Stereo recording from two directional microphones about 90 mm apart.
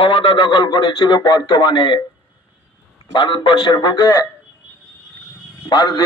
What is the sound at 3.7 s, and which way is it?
Speech, 50° left (ahead or behind).